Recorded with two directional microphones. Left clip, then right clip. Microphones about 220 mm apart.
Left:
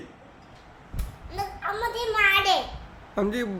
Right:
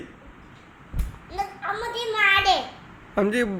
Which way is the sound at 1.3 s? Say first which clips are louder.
Right 2 dB; 15° left (ahead or behind).